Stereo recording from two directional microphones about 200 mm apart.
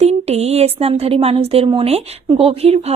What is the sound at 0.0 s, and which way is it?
Speech, 30° right (ahead or behind).